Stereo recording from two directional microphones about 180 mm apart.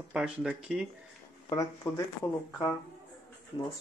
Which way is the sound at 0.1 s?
5° right (ahead or behind).